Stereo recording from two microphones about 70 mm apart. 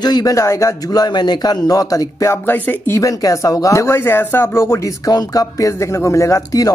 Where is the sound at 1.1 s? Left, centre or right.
Left.